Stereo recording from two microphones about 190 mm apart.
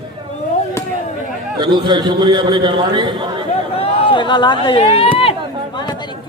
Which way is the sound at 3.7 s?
30° left (ahead or behind).